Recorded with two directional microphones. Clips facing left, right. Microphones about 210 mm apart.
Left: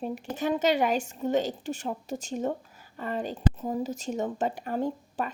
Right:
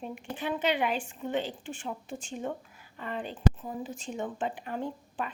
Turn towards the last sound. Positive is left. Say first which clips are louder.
# left 5 dB
turn(degrees=40)  # may be behind; listen again after turning